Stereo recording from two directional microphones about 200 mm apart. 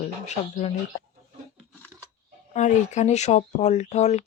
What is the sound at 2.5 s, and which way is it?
Speech, 35° left (ahead or behind).